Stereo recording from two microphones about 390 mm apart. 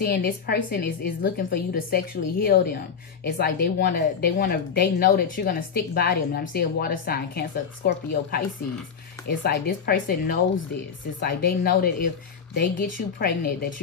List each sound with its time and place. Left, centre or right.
0.0 s speech: left